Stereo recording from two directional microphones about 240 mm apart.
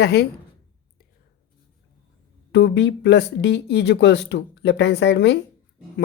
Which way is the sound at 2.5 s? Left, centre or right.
Left.